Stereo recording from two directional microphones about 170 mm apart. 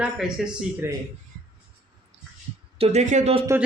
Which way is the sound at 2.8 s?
45° right (ahead or behind).